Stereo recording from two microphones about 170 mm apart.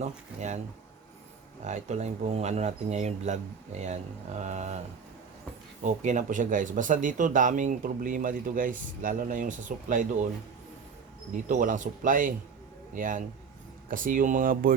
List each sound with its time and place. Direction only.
0.0 s speech: 40° right (ahead or behind)
1.6 s speech: 40° right (ahead or behind)
5.8 s speech: 45° right (ahead or behind)
11.4 s speech: 50° right (ahead or behind)